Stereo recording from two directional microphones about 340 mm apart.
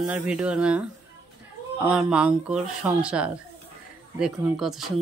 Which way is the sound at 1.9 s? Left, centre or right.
Centre.